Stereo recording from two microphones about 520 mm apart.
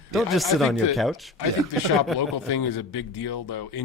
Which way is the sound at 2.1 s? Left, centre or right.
Left.